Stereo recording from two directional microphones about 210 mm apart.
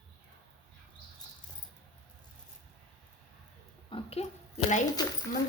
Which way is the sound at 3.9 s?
25° left (ahead or behind).